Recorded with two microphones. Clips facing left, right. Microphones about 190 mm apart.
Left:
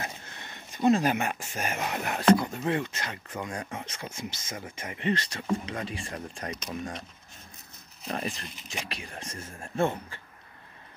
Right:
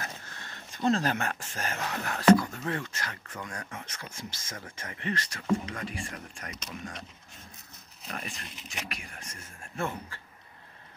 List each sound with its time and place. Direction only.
0.0 s speech: 20° left (ahead or behind)
8.1 s speech: 30° left (ahead or behind)